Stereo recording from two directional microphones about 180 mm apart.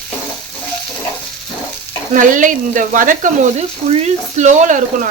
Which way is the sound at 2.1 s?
45° right (ahead or behind).